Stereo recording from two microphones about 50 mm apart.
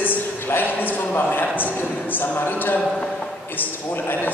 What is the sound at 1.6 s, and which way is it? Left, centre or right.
A man's voice, left.